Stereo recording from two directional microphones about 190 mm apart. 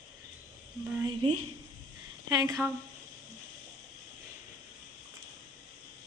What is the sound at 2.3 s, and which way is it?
Speech, 20° right (ahead or behind).